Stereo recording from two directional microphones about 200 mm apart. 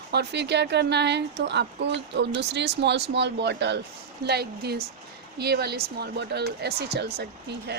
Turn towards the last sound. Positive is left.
turn(degrees=-55)  # may be behind; listen again after turning